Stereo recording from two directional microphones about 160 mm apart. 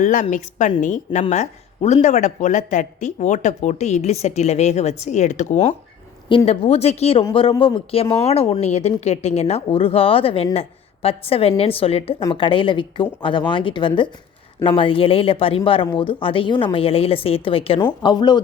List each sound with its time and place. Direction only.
0.0 s speech: 55° left (ahead or behind)
6.2 s speech: 35° left (ahead or behind)